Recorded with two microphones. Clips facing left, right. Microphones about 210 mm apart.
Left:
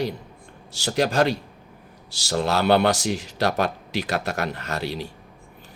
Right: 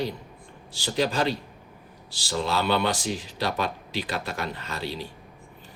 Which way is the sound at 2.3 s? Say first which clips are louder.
Left 5 dB; 70° left (ahead or behind).